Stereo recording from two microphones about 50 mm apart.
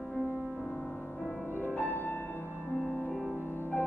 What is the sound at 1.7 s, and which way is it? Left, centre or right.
Music, left.